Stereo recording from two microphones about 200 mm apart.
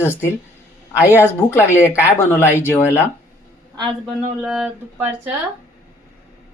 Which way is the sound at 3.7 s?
20° right (ahead or behind).